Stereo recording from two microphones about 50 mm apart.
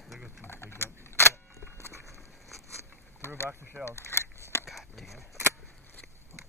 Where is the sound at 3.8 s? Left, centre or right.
Left.